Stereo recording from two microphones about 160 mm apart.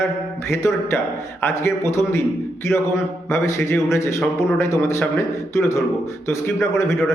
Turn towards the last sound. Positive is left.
turn(degrees=20)  # may be behind; listen again after turning